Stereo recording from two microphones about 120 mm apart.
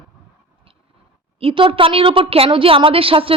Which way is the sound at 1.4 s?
45° right (ahead or behind).